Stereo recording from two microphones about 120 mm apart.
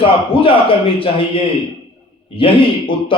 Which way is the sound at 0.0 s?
50° left (ahead or behind).